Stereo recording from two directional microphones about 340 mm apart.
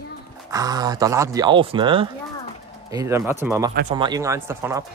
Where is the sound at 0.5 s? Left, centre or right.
Centre.